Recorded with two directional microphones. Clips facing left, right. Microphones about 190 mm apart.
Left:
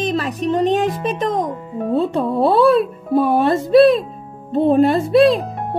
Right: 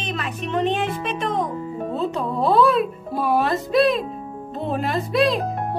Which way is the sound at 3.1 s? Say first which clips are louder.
Left 7 dB; 30° left (ahead or behind).